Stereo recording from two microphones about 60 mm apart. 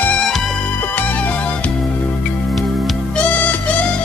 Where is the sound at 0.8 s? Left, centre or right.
Left.